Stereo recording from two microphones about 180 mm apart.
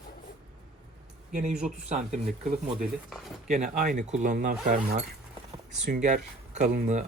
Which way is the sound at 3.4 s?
40° right (ahead or behind).